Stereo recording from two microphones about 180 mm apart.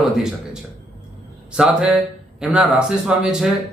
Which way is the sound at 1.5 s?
5° right (ahead or behind).